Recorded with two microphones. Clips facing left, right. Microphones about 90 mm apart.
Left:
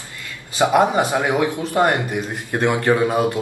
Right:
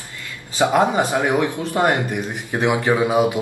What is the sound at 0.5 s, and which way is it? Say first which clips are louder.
Speech: left 1 dB; 15° left (ahead or behind).